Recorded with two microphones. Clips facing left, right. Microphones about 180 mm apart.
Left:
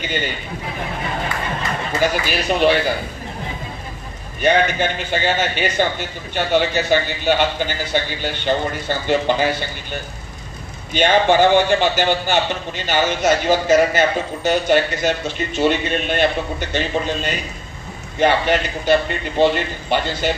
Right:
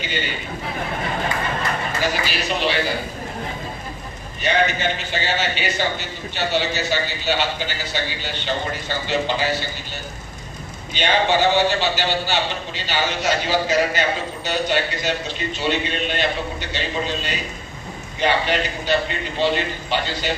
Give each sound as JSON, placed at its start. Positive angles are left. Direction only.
{"t": 0.0, "sound": "a man's voice", "side_deg": 50}
{"t": 2.0, "sound": "a man's voice", "side_deg": 50}
{"t": 4.4, "sound": "a man's voice", "side_deg": 50}
{"t": 10.9, "sound": "a man's voice", "side_deg": 50}